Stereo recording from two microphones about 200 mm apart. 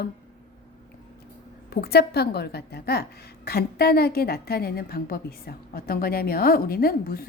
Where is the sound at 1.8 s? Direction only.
50° left (ahead or behind).